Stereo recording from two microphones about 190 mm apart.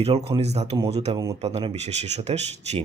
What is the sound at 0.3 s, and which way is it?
Speech, 35° right (ahead or behind).